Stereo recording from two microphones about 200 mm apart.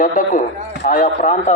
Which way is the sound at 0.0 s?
40° left (ahead or behind).